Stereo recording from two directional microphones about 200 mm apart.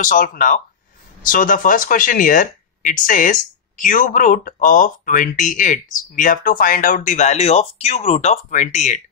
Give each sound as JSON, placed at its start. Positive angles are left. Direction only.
{"t": 0.0, "sound": "speech", "side_deg": 45}